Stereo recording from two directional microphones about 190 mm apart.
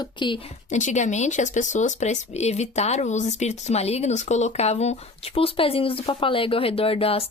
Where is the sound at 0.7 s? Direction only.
40° left (ahead or behind).